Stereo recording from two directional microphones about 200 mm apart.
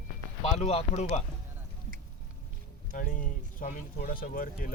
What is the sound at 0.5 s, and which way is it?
Speech, 30° left (ahead or behind).